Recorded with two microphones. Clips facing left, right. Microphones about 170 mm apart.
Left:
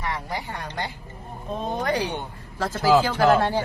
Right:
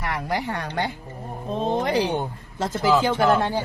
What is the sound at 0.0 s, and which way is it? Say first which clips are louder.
Speech: right 4 dB; 75° right (ahead or behind).